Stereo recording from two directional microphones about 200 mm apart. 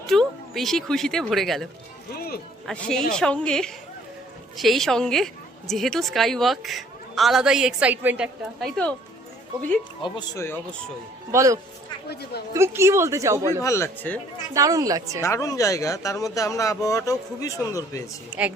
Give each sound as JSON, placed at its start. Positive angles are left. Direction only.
{"t": 0.1, "sound": "speech", "side_deg": 0}
{"t": 2.1, "sound": "music", "side_deg": 50}
{"t": 2.6, "sound": "a woman's voice", "side_deg": 5}
{"t": 10.0, "sound": "speech", "side_deg": 20}
{"t": 11.3, "sound": "speech", "side_deg": -15}
{"t": 12.0, "sound": "speech", "side_deg": 55}
{"t": 12.5, "sound": "speech", "side_deg": -15}
{"t": 13.6, "sound": "speech", "side_deg": 15}
{"t": 14.5, "sound": "speech", "side_deg": -15}
{"t": 15.2, "sound": "speech", "side_deg": 15}
{"t": 18.3, "sound": "speech", "side_deg": -5}